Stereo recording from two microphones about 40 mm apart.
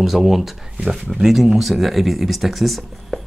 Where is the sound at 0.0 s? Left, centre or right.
Centre.